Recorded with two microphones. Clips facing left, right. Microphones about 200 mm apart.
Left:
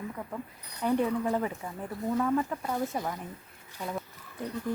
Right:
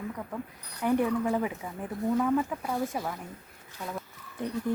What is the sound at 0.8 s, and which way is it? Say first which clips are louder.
Speech: right 1 dB; 15° right (ahead or behind).